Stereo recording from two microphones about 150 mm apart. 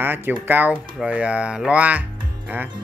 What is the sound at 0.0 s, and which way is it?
Speech, 15° right (ahead or behind).